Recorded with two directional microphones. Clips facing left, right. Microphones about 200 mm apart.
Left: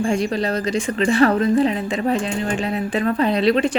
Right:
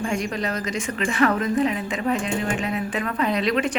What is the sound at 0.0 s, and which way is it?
A woman's voice, 30° left (ahead or behind).